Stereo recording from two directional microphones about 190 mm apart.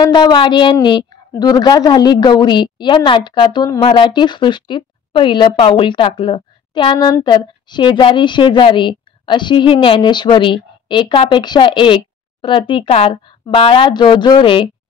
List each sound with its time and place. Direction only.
0.0 s a woman's voice: 25° left (ahead or behind)